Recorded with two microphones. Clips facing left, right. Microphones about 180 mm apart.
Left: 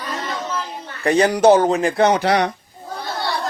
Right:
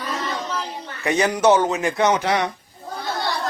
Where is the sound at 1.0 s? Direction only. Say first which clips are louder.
Left 4 dB; 35° left (ahead or behind).